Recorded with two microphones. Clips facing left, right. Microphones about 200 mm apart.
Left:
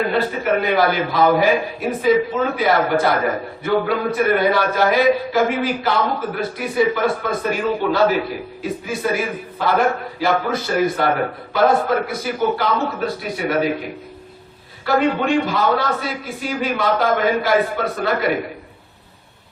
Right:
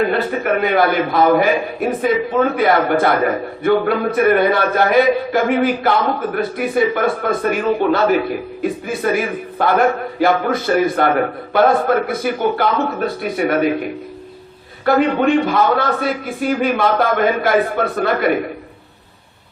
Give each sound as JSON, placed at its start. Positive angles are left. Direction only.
{"t": 0.1, "sound": "a man's voice", "side_deg": -55}
{"t": 14.8, "sound": "a man's voice", "side_deg": -55}